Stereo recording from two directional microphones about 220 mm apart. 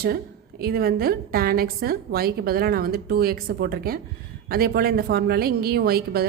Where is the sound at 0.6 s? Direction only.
45° right (ahead or behind).